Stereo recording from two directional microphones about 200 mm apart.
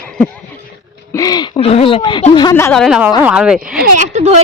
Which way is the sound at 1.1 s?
20° left (ahead or behind).